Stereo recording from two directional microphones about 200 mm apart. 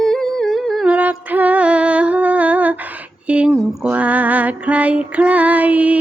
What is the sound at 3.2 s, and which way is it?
Music, 5° right (ahead or behind).